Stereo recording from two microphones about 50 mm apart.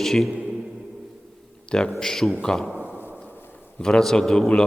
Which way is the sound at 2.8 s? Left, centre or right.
Right.